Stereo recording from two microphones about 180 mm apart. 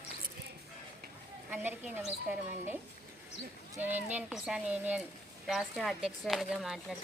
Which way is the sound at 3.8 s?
10° right (ahead or behind).